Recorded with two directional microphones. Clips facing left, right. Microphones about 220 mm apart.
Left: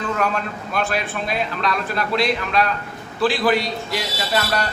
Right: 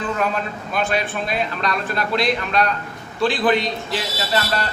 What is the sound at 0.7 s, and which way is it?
A man's voice, centre (ahead or behind).